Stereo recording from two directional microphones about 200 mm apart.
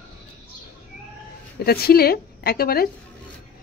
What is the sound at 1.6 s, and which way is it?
A woman's voice, 50° left (ahead or behind).